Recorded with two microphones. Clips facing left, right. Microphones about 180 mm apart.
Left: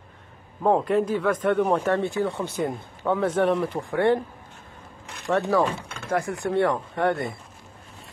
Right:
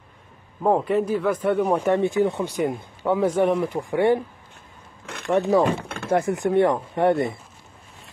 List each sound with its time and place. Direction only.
0.6 s speech: 5° right (ahead or behind)
5.3 s speech: 15° right (ahead or behind)